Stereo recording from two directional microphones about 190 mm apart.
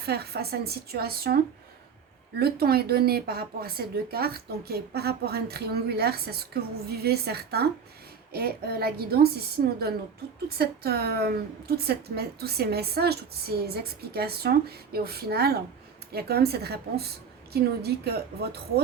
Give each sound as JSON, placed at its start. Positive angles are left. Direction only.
{"t": 0.0, "sound": "a woman's voice", "side_deg": -55}
{"t": 2.4, "sound": "a woman's voice", "side_deg": -55}
{"t": 10.6, "sound": "a woman's voice", "side_deg": -55}